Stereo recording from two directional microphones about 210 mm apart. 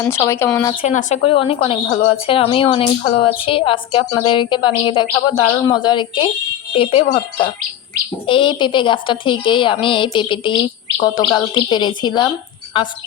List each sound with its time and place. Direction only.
0.0 s speech: 15° left (ahead or behind)
0.7 s a woman's voice: 30° left (ahead or behind)